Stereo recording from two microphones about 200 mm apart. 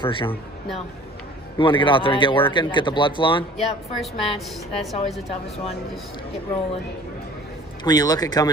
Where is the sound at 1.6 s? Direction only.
25° left (ahead or behind).